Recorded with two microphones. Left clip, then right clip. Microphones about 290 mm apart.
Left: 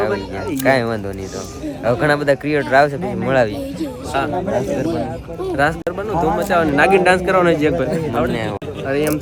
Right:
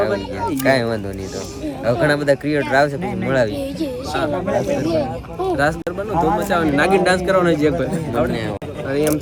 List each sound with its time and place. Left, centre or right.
0.0 s speech: centre